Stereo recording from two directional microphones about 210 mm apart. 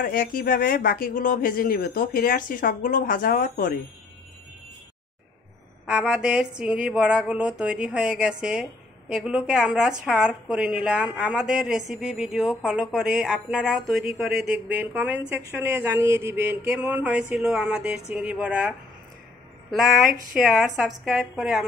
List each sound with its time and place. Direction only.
0.0 s speech: 40° left (ahead or behind)
5.9 s a woman's voice: 5° right (ahead or behind)
20.3 s a woman's voice: centre (ahead or behind)